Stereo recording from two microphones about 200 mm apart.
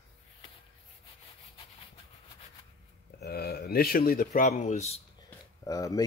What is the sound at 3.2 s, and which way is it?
Speech, 50° left (ahead or behind).